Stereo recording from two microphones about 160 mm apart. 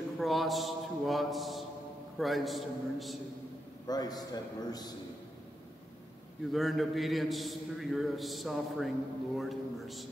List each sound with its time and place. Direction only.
0.2 s a man's voice: centre (ahead or behind)
3.8 s a man's voice: 25° left (ahead or behind)
6.5 s a man's voice: centre (ahead or behind)